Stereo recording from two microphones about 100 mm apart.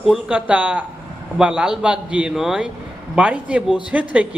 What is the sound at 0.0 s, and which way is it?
A man's voice, 10° right (ahead or behind).